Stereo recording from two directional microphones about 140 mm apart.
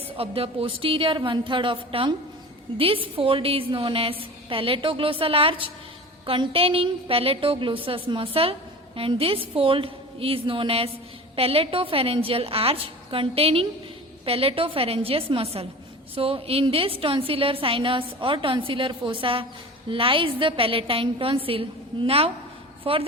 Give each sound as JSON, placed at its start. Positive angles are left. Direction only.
{"t": 0.2, "sound": "a woman's voice", "side_deg": -45}